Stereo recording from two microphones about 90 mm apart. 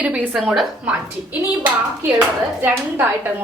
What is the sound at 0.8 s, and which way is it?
Speech, 15° right (ahead or behind).